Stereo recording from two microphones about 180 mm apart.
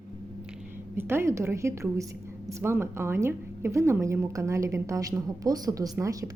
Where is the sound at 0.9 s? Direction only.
15° right (ahead or behind).